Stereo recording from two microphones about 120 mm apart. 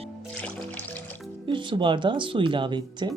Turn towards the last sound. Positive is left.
turn(degrees=-40)  # may be behind; listen again after turning